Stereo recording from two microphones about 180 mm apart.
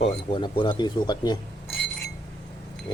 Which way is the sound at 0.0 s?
30° left (ahead or behind).